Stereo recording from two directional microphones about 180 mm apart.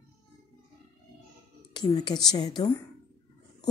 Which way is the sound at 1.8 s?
25° left (ahead or behind).